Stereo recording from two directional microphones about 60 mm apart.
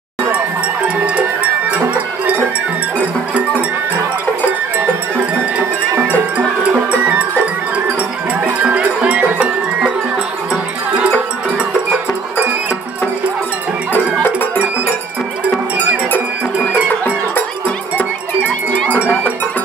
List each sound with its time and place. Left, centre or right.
0.8 s music: centre
4.7 s music: right
8.3 s cowbell: right
17.0 s a sound: left
18.5 s cowbell: left
18.9 s cowbell: right